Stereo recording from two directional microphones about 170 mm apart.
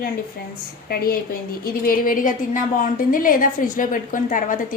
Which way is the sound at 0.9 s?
60° left (ahead or behind).